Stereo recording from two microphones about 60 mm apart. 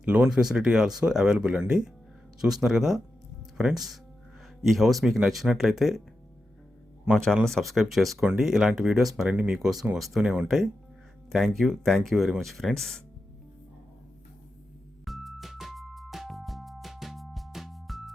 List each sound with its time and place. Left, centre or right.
0.0 s speech: right
0.3 s speech: centre
4.6 s speech: centre
7.1 s speech: centre
11.3 s speech: centre
15.0 s music: centre